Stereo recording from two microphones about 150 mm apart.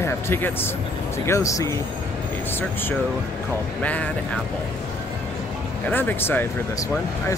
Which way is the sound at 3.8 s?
10° left (ahead or behind).